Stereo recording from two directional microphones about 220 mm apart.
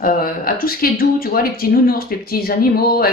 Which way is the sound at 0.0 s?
40° left (ahead or behind).